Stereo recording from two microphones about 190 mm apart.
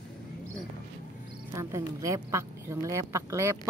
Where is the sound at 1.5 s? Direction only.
15° right (ahead or behind).